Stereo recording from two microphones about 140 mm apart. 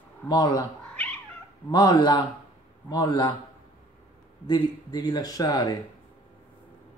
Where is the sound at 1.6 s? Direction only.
30° left (ahead or behind).